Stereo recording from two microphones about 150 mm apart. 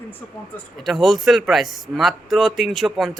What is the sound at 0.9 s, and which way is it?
Speech, centre (ahead or behind).